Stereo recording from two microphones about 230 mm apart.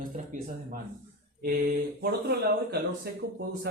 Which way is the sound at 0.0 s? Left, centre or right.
Right.